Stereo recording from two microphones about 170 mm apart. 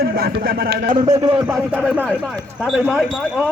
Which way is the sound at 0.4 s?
65° right (ahead or behind).